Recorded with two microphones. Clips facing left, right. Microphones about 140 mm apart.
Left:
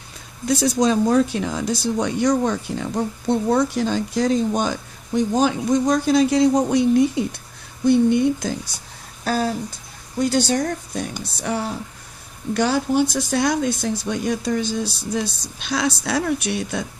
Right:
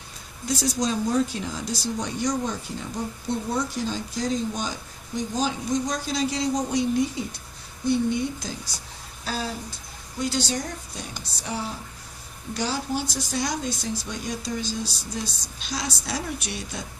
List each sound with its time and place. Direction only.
0.4 s speech: 65° left (ahead or behind)